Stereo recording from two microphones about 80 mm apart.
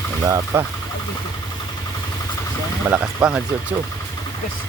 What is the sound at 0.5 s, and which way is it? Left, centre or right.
Speech, right.